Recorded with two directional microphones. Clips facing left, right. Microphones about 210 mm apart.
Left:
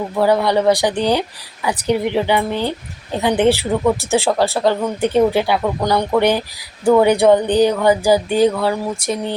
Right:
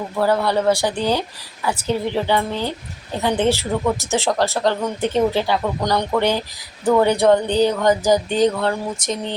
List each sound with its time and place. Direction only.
0.2 s speech: 15° left (ahead or behind)